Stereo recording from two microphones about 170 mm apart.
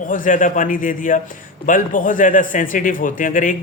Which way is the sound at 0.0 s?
50° left (ahead or behind).